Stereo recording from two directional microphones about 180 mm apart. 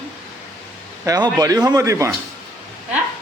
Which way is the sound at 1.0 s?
20° right (ahead or behind).